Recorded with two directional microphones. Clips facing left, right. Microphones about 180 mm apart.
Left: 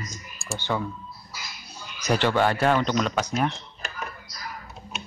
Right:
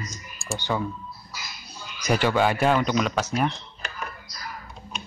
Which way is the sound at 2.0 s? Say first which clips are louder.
Even; 10° right (ahead or behind).